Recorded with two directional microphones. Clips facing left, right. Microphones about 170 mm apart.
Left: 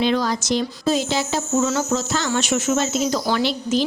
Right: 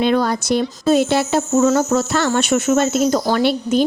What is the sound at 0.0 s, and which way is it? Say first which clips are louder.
Speech: right 3 dB; 55° right (ahead or behind).